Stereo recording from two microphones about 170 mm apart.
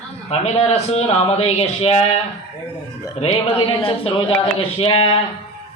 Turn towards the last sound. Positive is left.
turn(degrees=30)  # may be behind; listen again after turning